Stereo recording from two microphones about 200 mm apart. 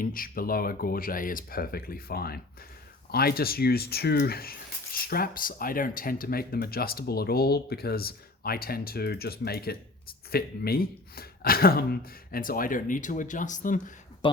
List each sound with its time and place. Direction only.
0.0 s speech: 45° left (ahead or behind)